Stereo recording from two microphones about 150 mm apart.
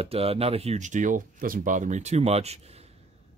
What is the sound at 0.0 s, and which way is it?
Speech, 40° right (ahead or behind).